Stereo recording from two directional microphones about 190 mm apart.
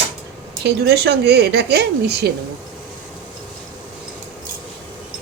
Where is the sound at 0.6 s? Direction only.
60° right (ahead or behind).